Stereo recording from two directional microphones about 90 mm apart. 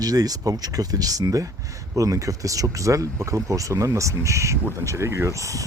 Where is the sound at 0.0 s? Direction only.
45° right (ahead or behind).